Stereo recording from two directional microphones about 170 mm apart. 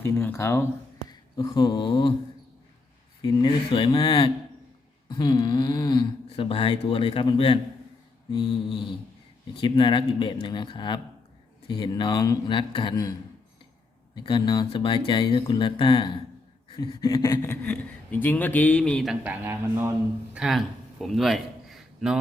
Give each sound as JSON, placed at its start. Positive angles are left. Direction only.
{"t": 0.0, "sound": "speech", "side_deg": 15}
{"t": 3.2, "sound": "speech", "side_deg": 20}
{"t": 14.2, "sound": "speech", "side_deg": 25}
{"t": 19.2, "sound": "a man's voice", "side_deg": -10}